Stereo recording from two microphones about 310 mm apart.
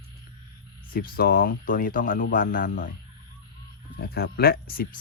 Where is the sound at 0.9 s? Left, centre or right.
Left.